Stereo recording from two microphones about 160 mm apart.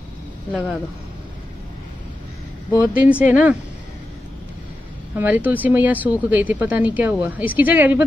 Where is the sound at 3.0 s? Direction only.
10° right (ahead or behind).